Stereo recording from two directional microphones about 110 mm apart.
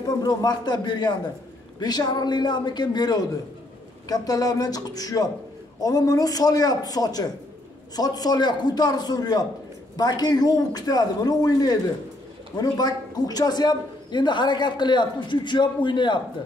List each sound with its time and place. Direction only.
0.2 s a man's voice: 35° left (ahead or behind)